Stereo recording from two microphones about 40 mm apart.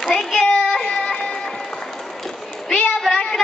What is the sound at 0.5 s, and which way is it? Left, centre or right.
Child singing, centre.